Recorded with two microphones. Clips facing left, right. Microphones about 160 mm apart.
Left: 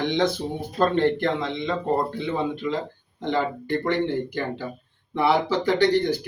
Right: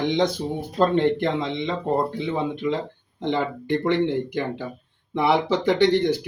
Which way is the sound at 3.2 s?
20° right (ahead or behind).